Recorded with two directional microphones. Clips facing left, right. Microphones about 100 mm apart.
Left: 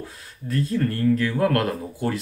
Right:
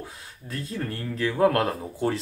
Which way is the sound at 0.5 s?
20° right (ahead or behind).